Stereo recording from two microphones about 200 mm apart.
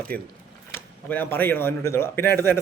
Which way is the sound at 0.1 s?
10° left (ahead or behind).